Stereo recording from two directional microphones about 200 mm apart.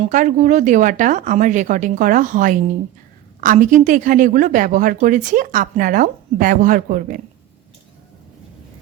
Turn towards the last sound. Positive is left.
turn(degrees=-45)  # may be behind; listen again after turning